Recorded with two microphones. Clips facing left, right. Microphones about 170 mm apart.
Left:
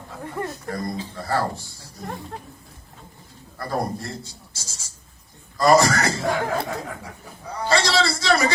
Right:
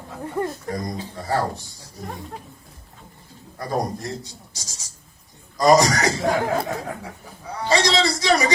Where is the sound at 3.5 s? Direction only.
15° right (ahead or behind).